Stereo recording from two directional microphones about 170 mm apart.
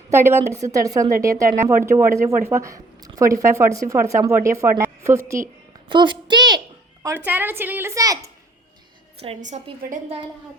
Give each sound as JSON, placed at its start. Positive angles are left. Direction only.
{"t": 0.1, "sound": "a child's voice", "side_deg": -15}
{"t": 5.9, "sound": "a child's voice", "side_deg": -25}
{"t": 7.3, "sound": "speech", "side_deg": -10}
{"t": 9.2, "sound": "a woman's voice", "side_deg": -40}